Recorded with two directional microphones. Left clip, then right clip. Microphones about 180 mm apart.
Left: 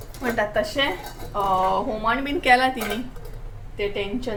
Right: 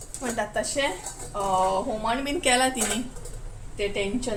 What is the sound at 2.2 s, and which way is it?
Speech, 20° right (ahead or behind).